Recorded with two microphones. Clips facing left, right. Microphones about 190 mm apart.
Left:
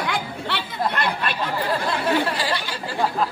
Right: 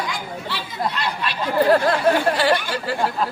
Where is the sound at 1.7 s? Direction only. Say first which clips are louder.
Right 4 dB; 60° right (ahead or behind).